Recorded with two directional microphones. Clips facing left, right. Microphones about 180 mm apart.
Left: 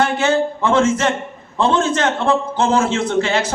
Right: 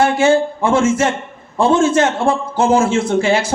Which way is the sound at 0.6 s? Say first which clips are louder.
Right 1 dB; 10° right (ahead or behind).